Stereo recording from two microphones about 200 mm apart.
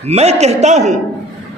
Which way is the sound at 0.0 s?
30° right (ahead or behind).